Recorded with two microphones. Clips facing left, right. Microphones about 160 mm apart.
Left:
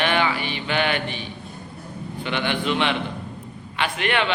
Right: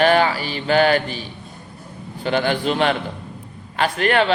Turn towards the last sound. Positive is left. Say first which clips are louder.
# right 6 dB
turn(degrees=-40)  # may be behind; listen again after turning